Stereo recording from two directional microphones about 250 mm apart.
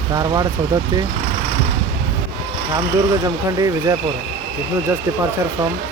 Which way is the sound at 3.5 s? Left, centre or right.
Centre.